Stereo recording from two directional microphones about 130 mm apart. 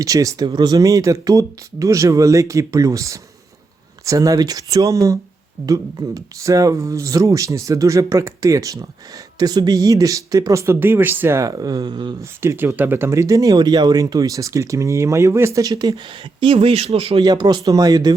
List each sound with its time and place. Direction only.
0.0 s speech: 25° right (ahead or behind)
12.2 s speech: 20° right (ahead or behind); by 17.2 s 50° right (ahead or behind)
17.2 s speech: 30° right (ahead or behind)